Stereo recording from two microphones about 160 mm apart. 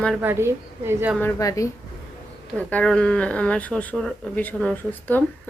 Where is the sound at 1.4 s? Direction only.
20° left (ahead or behind).